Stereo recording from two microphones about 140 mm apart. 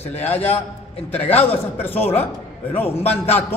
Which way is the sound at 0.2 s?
15° left (ahead or behind).